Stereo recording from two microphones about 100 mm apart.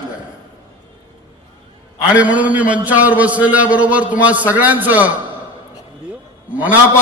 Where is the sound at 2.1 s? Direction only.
15° right (ahead or behind).